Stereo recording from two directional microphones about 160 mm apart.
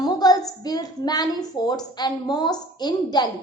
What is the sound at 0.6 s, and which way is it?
A woman's voice, 25° left (ahead or behind).